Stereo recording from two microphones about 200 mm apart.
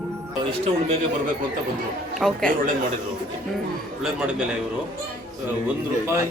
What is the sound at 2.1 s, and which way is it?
Speech, centre (ahead or behind).